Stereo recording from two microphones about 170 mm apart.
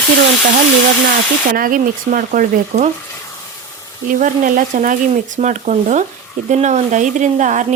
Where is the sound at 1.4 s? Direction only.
55° right (ahead or behind).